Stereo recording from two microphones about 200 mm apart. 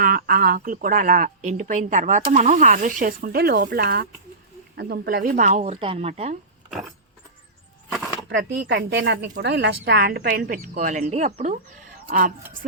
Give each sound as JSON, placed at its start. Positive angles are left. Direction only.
{"t": 0.0, "sound": "a woman's voice", "side_deg": -45}
{"t": 8.3, "sound": "a woman's voice", "side_deg": -60}